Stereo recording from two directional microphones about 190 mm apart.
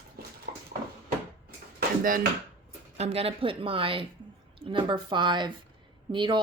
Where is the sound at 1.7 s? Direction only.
45° right (ahead or behind).